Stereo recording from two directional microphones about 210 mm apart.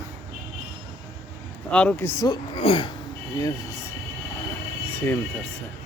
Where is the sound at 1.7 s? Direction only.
5° left (ahead or behind).